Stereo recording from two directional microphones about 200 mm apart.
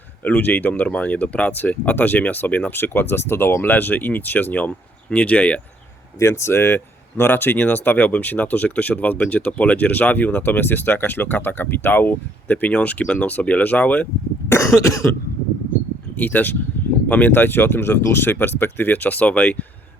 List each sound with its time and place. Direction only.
0.3 s speech: 10° left (ahead or behind)
16.1 s speech: 10° left (ahead or behind)
16.8 s a sound: 10° left (ahead or behind)
17.1 s speech: 10° left (ahead or behind)